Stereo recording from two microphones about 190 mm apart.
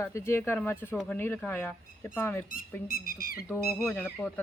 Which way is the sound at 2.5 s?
50° left (ahead or behind).